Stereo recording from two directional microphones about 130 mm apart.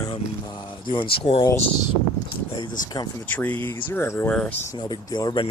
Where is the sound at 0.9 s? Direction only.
40° left (ahead or behind).